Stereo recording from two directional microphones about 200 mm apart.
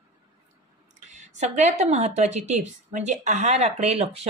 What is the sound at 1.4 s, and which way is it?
A woman's voice, 35° right (ahead or behind).